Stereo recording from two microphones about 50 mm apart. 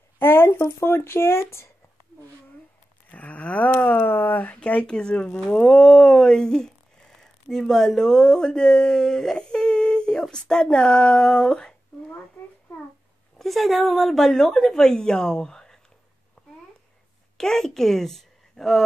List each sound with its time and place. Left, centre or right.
0.2 s speech: left
3.1 s livestock: left
4.0 s speech: left
4.6 s speech: left
5.5 s a woman's voice: centre
13.4 s a woman's voice: centre
16.4 s a sound: centre
17.4 s a woman's voice: centre